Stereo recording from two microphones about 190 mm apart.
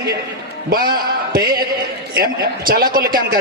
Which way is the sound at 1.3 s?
50° right (ahead or behind).